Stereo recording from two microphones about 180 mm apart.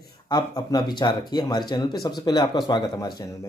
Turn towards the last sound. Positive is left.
turn(degrees=25)  # may be behind; listen again after turning